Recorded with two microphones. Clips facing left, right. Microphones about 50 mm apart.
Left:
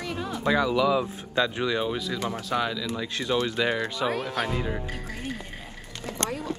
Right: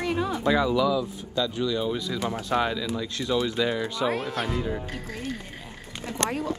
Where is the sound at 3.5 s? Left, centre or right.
Left.